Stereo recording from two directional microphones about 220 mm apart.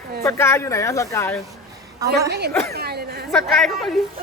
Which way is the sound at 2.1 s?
45° right (ahead or behind).